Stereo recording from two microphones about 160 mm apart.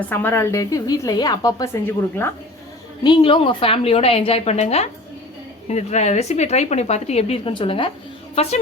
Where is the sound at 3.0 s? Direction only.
30° left (ahead or behind).